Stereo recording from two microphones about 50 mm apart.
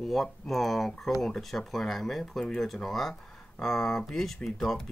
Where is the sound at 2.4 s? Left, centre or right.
Centre.